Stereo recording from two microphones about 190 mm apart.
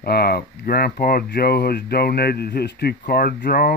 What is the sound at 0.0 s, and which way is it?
Speech, 55° left (ahead or behind).